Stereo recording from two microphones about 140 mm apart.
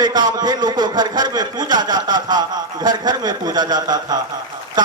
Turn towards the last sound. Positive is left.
turn(degrees=-30)  # may be behind; listen again after turning